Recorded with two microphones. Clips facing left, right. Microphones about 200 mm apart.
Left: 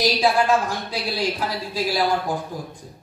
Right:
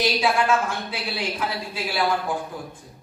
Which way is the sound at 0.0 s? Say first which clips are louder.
Left 2 dB; 35° left (ahead or behind).